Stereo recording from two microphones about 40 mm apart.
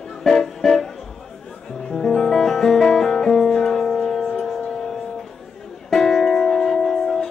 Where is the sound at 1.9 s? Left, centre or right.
Centre.